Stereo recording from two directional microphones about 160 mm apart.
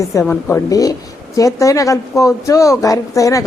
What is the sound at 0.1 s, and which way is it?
A woman's voice, 15° left (ahead or behind).